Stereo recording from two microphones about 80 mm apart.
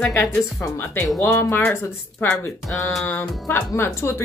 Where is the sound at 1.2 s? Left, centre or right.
Left.